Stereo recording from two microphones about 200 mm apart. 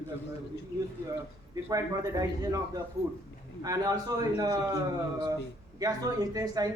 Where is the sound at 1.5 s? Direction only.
15° right (ahead or behind).